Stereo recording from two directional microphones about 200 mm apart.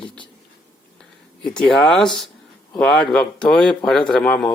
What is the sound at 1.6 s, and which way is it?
Speech, centre (ahead or behind).